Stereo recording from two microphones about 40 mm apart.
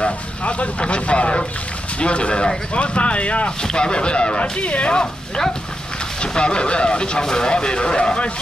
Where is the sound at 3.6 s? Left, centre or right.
Left.